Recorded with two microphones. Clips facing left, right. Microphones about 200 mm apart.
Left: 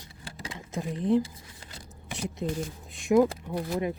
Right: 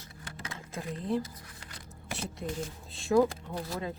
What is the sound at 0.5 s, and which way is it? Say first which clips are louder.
Speech: left 5 dB; 15° left (ahead or behind).